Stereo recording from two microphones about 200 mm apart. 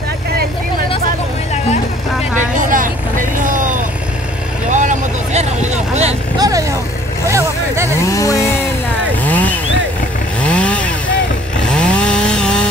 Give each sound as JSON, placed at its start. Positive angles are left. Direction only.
{"t": 2.5, "sound": "vehicle", "side_deg": -40}
{"t": 6.3, "sound": "vehicle", "side_deg": -20}
{"t": 8.0, "sound": "a sound", "side_deg": 15}
{"t": 9.2, "sound": "vehicle", "side_deg": 10}
{"t": 10.4, "sound": "chainsaw", "side_deg": 5}